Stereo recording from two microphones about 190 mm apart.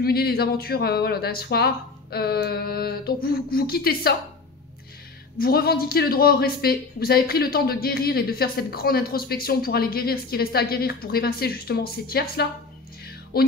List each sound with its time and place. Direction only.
0.0 s speech: 55° left (ahead or behind)
5.4 s speech: 55° left (ahead or behind)